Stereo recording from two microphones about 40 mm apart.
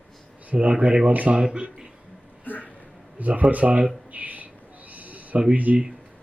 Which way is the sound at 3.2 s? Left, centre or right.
Right.